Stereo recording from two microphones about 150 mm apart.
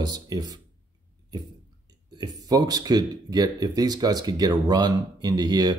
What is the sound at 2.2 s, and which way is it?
Speech, 25° right (ahead or behind).